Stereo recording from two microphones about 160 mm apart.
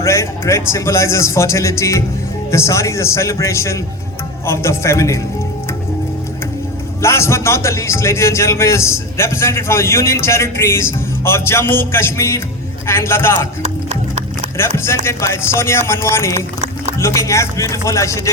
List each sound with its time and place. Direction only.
0.0 s a man's voice: 20° left (ahead or behind)
7.0 s a man's voice: 15° left (ahead or behind)
13.6 s music: 45° right (ahead or behind)
14.8 s a man's voice: 15° left (ahead or behind)
17.0 s a sound: 20° left (ahead or behind)